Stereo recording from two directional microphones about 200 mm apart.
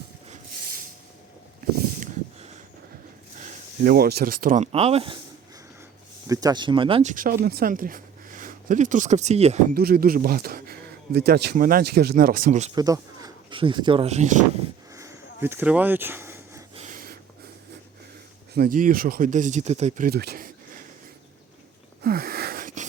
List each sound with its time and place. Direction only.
3.4 s speech: 50° right (ahead or behind); by 5.1 s 30° right (ahead or behind)
6.2 s speech: 20° right (ahead or behind)
7.1 s speech: 45° right (ahead or behind)
9.7 s speech: 50° right (ahead or behind)
12.7 s speech: 20° right (ahead or behind); by 14.4 s 35° right (ahead or behind)
14.9 s a sound: 15° right (ahead or behind)
16.7 s a sound: 40° right (ahead or behind)
18.5 s speech: 45° right (ahead or behind)
20.1 s a sound: 50° right (ahead or behind)
22.0 s wheeze: 50° right (ahead or behind)